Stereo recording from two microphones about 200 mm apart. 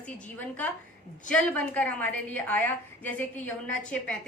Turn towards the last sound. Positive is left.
turn(degrees=5)  # may be behind; listen again after turning